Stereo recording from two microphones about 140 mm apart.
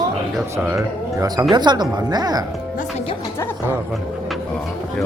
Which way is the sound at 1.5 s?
30° right (ahead or behind).